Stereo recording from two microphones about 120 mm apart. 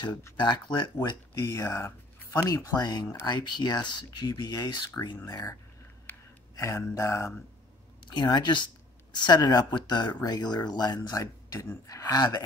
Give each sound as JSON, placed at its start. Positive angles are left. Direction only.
{"t": 0.4, "sound": "speech", "side_deg": 40}
{"t": 1.4, "sound": "speech", "side_deg": 25}
{"t": 8.1, "sound": "speech", "side_deg": 35}